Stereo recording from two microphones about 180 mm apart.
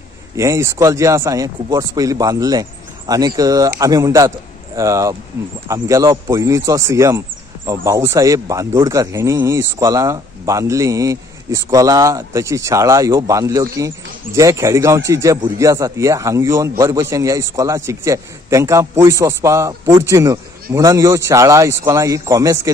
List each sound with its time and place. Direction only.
0.4 s speech: 15° right (ahead or behind)